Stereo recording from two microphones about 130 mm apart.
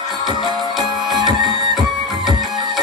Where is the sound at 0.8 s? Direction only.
30° right (ahead or behind).